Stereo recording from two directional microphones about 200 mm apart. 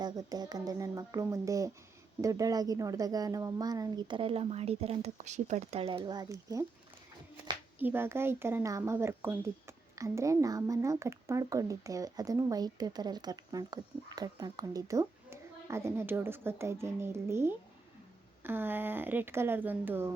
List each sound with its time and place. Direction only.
0.0 s a woman's voice: 20° right (ahead or behind)
7.8 s speech: 10° right (ahead or behind)